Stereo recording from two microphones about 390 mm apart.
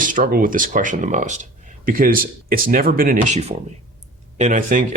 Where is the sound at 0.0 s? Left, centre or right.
Centre.